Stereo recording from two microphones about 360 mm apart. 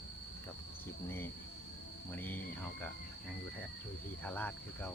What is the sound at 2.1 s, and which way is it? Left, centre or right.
Speech, centre.